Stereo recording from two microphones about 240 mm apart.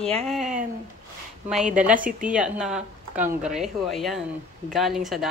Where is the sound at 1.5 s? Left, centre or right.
Centre.